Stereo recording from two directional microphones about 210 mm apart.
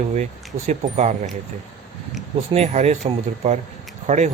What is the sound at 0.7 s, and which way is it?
Speech, 35° right (ahead or behind).